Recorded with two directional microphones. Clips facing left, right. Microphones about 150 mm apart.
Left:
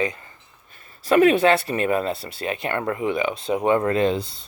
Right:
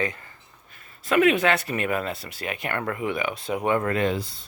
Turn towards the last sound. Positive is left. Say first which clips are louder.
# left 4 dB
turn(degrees=25)  # may be behind; listen again after turning